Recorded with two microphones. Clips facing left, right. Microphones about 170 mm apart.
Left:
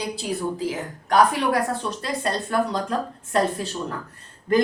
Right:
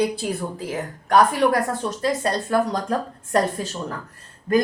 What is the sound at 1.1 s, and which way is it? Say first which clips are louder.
A woman's voice: right 2 dB; 45° right (ahead or behind).